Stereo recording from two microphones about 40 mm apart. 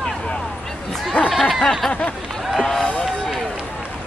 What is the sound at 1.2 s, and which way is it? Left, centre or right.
Speech, left.